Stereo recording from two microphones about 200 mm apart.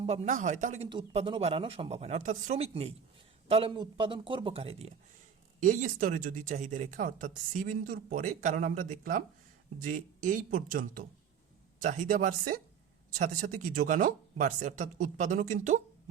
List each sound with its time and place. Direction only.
0.0 s speech: 35° right (ahead or behind)